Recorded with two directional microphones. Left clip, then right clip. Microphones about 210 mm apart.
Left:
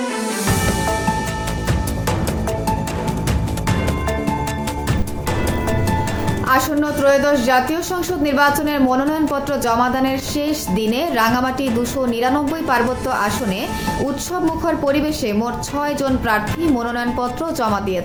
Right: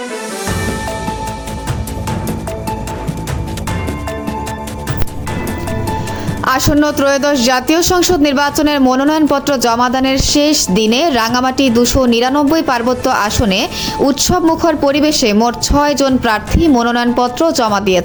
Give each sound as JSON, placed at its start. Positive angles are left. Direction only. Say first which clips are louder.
{"t": 6.4, "sound": "speech", "louder": "right 5 dB", "side_deg": -45}